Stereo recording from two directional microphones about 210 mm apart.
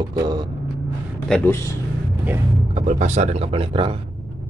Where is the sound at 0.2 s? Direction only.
20° right (ahead or behind).